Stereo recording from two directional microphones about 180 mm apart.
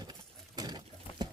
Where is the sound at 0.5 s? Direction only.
20° right (ahead or behind).